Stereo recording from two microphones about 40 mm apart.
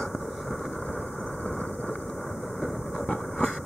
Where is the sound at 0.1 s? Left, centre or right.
Centre.